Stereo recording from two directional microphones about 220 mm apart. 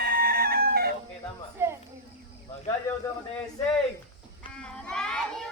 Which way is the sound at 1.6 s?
10° right (ahead or behind).